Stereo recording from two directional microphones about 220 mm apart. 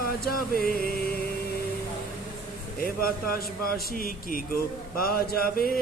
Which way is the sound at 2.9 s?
40° left (ahead or behind).